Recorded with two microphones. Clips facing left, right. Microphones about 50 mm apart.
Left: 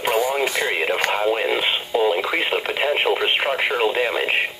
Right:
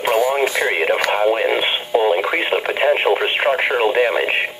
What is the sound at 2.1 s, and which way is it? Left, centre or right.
Speech, right.